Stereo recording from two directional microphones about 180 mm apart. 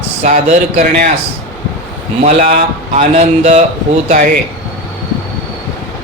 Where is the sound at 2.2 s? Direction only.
40° right (ahead or behind).